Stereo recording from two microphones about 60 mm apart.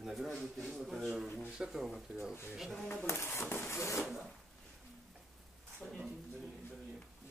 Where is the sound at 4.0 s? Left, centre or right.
Centre.